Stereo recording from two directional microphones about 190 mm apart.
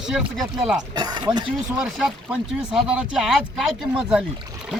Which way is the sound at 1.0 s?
20° right (ahead or behind).